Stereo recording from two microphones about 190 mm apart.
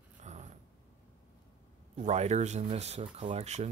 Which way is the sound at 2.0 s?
35° right (ahead or behind).